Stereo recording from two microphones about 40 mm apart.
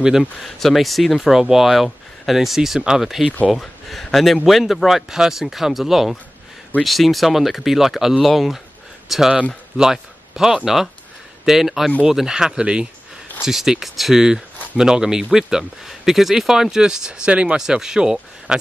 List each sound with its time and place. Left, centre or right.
0.6 s a man's voice: centre
14.2 s speech: centre
17.6 s speech: centre